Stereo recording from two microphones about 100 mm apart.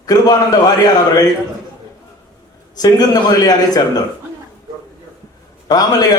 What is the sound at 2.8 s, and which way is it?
A man's voice, 40° left (ahead or behind).